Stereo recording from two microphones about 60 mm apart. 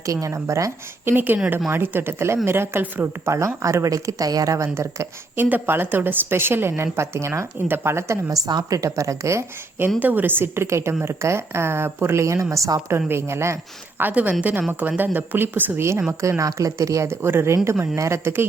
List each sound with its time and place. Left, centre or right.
0.0 s speech: right
1.0 s a woman's voice: right
3.2 s speech: right
5.4 s a woman's voice: right
10.0 s a woman's voice: right
13.1 s a woman's voice: right
14.0 s a woman's voice: right
15.8 s a woman's voice: right
16.4 s speech: right
17.1 s a woman's voice: right